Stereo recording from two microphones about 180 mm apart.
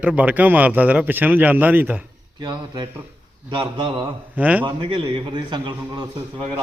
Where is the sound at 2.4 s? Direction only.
25° right (ahead or behind).